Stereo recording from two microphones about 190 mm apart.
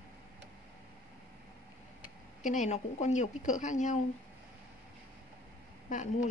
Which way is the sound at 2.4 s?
40° left (ahead or behind).